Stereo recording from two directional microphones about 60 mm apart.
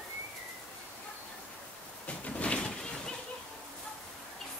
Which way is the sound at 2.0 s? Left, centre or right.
Left.